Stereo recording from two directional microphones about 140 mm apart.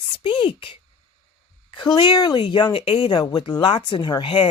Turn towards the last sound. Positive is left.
turn(degrees=35)  # may be behind; listen again after turning